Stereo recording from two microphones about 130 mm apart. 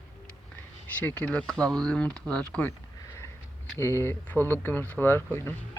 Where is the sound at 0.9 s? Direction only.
10° left (ahead or behind).